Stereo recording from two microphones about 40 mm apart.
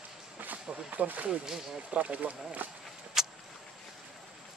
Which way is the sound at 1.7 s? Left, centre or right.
Right.